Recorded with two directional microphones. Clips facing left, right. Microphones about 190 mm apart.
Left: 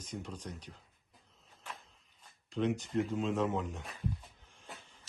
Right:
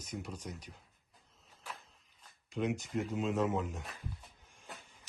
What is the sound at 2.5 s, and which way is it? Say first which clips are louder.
Speech: left 2 dB; 10° right (ahead or behind).